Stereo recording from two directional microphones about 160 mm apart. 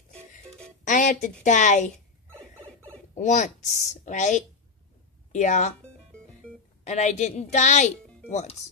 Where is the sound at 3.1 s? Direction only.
45° left (ahead or behind).